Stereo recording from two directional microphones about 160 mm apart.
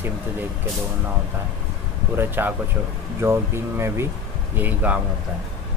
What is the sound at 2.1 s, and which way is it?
Speech, 15° right (ahead or behind).